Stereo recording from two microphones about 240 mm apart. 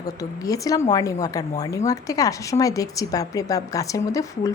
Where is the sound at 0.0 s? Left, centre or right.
Centre.